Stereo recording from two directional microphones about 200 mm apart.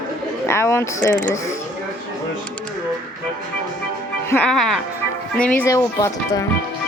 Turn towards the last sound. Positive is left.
turn(degrees=15)  # may be behind; listen again after turning